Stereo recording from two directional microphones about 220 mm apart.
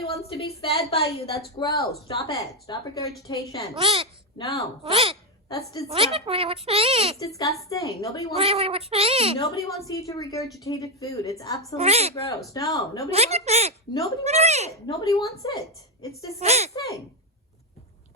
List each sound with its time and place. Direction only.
0.0 s a woman's voice: 25° left (ahead or behind)
3.8 s speech: 25° right (ahead or behind)
5.5 s a woman's voice: 15° left (ahead or behind)
5.9 s speech: 25° right (ahead or behind)
7.2 s a woman's voice: 15° left (ahead or behind)
8.4 s speech: 25° right (ahead or behind)
9.4 s a woman's voice: 15° left (ahead or behind)
11.8 s speech: 30° right (ahead or behind)
12.5 s a woman's voice: 15° left (ahead or behind)
13.1 s speech: 30° right (ahead or behind)
14.8 s a woman's voice: 15° left (ahead or behind)
16.4 s speech: 30° right (ahead or behind)
16.7 s a woman's voice: 15° left (ahead or behind)